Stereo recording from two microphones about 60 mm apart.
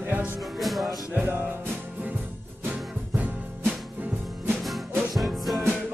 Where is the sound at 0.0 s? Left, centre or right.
Right.